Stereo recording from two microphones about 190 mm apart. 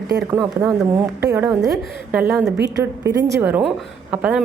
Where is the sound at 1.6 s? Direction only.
Centre (ahead or behind).